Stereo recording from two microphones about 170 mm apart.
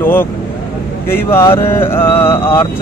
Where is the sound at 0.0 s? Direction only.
10° left (ahead or behind).